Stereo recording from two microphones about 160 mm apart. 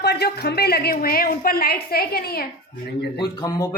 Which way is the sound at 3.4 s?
20° left (ahead or behind).